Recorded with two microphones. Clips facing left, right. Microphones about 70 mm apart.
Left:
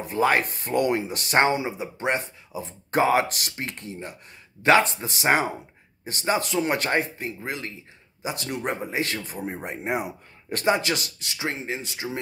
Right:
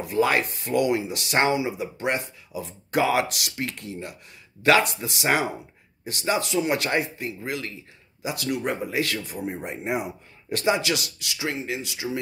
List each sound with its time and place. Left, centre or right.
0.0 s speech: left